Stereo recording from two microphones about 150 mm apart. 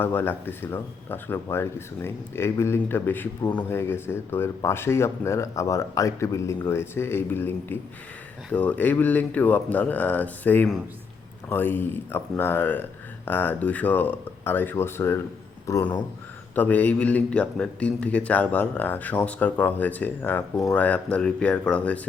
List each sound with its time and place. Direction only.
0.0 s a man's voice: 15° left (ahead or behind)